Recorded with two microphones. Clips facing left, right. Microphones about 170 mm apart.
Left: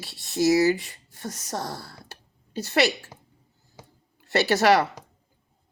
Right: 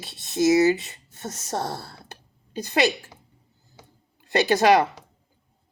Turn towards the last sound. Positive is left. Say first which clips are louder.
# right 2 dB
turn(degrees=-20)  # may be behind; listen again after turning